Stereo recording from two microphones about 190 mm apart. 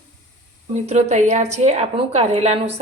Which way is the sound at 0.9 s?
35° right (ahead or behind).